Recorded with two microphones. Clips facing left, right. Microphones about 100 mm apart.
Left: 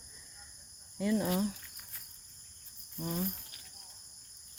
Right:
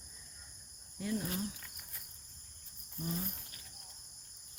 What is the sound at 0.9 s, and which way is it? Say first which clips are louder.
Speech: left 7 dB; 90° left.